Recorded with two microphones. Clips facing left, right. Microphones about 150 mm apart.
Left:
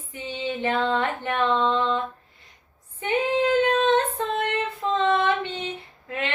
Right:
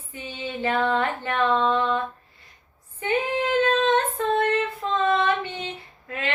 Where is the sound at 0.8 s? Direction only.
20° left (ahead or behind).